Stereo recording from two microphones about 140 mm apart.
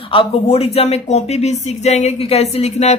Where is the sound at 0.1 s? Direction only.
40° left (ahead or behind).